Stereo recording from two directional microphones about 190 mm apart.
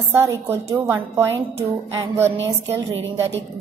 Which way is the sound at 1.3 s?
30° right (ahead or behind).